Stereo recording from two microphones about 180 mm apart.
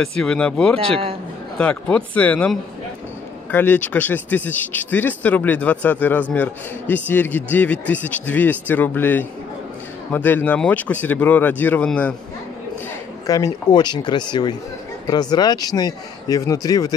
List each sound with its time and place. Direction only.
0.0 s speech: 5° left (ahead or behind)
0.7 s speech: 30° right (ahead or behind)
1.6 s speech: 5° left (ahead or behind)
13.3 s speech: 20° left (ahead or behind)